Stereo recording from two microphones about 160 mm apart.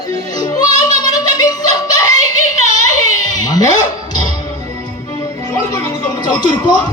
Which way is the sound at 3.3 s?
25° left (ahead or behind).